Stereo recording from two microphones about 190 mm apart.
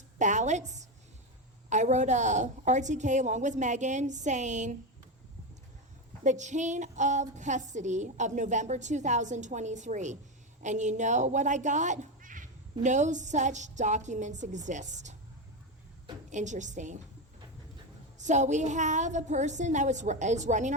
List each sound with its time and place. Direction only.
0.2 s speech: 40° right (ahead or behind)
6.2 s speech: 40° right (ahead or behind)
16.3 s speech: 40° right (ahead or behind)
18.3 s speech: 40° right (ahead or behind)